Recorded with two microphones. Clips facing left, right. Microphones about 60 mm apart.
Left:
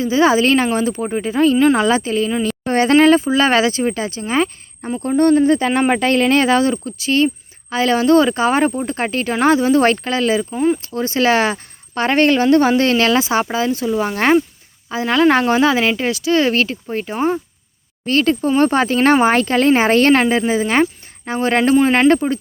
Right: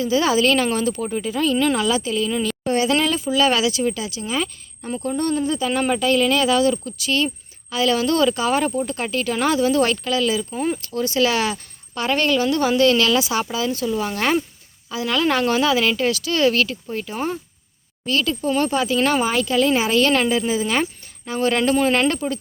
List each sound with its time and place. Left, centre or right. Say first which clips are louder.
0.0 s a woman's voice: left 4 dB; left
18.0 s a woman's voice: left 6 dB; left